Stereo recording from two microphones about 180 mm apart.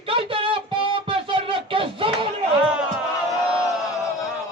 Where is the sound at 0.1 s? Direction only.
30° right (ahead or behind).